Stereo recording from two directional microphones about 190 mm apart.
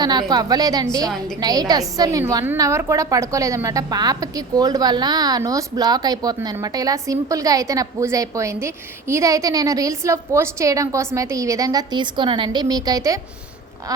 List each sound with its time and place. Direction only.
0.0 s a woman's voice: 20° right (ahead or behind)